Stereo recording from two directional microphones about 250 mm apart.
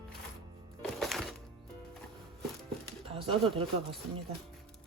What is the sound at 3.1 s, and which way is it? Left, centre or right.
Pigeon, right.